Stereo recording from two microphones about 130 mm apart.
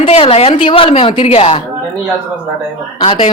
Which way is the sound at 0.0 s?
50° left (ahead or behind).